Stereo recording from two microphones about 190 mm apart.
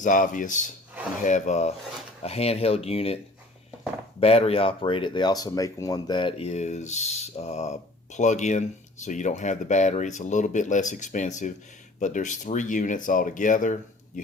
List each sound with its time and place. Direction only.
0.0 s speech: 45° left (ahead or behind)
4.2 s speech: 30° left (ahead or behind)